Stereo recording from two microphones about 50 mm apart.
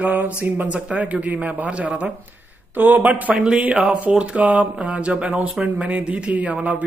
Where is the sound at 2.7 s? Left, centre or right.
Right.